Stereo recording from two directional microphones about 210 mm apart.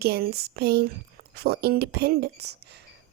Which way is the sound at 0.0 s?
45° right (ahead or behind).